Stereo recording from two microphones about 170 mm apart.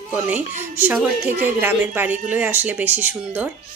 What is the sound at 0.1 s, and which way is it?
Speech, 10° right (ahead or behind).